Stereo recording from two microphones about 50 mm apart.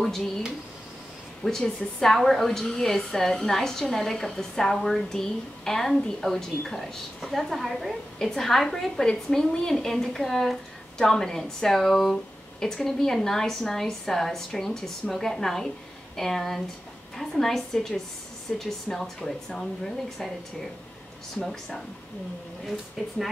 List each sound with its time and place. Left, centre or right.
0.0 s speech: centre
1.4 s a woman's voice: centre
21.5 s a woman's voice: centre